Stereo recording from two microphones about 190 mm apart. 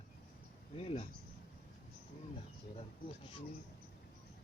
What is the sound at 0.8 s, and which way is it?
Speech, 30° left (ahead or behind).